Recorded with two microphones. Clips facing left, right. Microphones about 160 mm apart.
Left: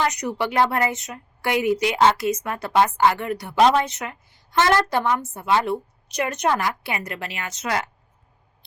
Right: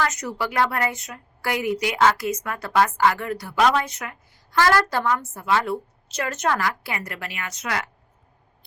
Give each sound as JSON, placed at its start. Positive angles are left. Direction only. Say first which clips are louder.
{"t": 0.0, "sound": "a woman's voice", "louder": "left 2 dB", "side_deg": 15}